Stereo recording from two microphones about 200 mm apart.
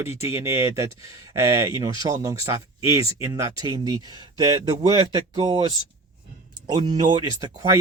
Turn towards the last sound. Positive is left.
turn(degrees=-20)  # may be behind; listen again after turning